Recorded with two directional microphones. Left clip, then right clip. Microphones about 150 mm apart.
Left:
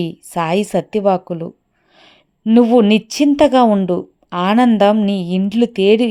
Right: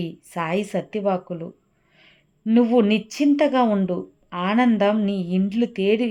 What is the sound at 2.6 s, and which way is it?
A woman's voice, 40° left (ahead or behind).